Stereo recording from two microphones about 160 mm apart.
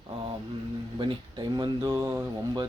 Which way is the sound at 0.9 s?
30° right (ahead or behind).